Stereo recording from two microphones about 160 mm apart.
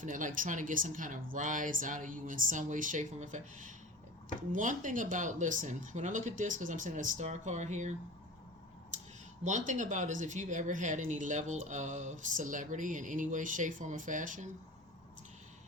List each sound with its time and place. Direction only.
0.0 s speech: 55° right (ahead or behind)
9.4 s speech: 50° right (ahead or behind)